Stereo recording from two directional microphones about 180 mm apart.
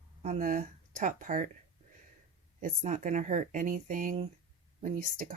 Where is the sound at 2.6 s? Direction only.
45° right (ahead or behind).